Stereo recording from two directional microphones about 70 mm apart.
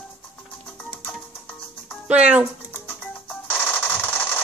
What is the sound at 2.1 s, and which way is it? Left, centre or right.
Music, centre.